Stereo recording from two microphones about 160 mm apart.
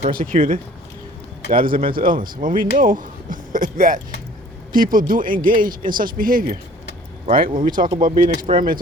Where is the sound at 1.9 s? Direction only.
60° right (ahead or behind).